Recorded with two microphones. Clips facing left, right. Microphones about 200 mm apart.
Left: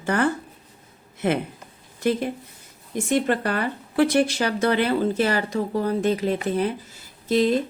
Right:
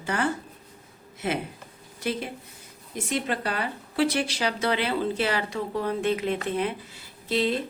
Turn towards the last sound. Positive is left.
turn(degrees=45)  # may be behind; listen again after turning